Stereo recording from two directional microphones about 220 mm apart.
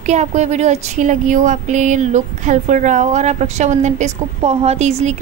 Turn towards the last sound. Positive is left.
turn(degrees=-30)  # may be behind; listen again after turning